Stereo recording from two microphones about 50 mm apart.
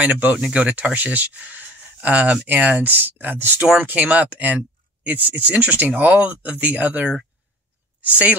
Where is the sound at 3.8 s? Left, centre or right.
Right.